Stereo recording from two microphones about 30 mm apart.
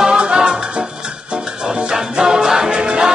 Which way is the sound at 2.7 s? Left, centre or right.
Right.